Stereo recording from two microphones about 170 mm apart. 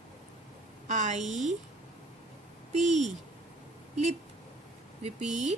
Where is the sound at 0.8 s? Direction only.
45° right (ahead or behind).